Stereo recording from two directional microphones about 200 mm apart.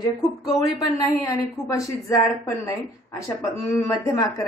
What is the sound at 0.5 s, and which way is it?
A woman's voice, 15° left (ahead or behind).